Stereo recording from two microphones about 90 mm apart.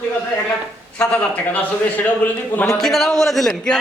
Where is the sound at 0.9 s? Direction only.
15° left (ahead or behind).